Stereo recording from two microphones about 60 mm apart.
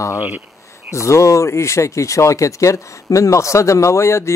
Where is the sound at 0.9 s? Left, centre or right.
Left.